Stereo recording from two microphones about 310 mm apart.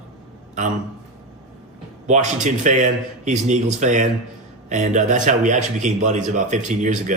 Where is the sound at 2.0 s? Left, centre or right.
Right.